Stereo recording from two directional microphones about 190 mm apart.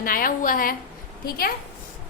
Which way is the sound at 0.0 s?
45° left (ahead or behind).